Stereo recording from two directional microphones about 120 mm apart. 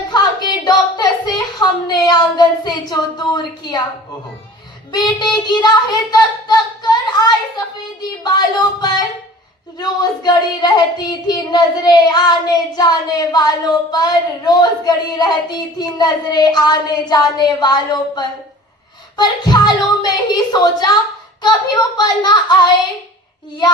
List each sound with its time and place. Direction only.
0.1 s a sound: 35° left (ahead or behind)
4.9 s speech: 35° left (ahead or behind)
8.2 s child singing: 35° left (ahead or behind)